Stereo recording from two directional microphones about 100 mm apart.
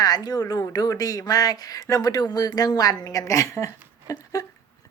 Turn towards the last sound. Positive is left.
turn(degrees=30)  # may be behind; listen again after turning